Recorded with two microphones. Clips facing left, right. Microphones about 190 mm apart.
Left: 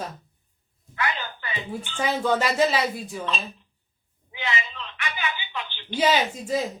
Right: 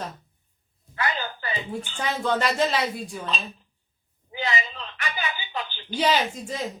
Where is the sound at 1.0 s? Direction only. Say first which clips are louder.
Right 1 dB; 35° right (ahead or behind).